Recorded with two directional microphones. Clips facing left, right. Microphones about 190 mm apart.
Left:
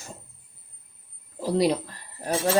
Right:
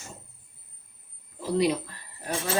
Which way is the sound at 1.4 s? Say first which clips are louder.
Left 2 dB; 35° left (ahead or behind).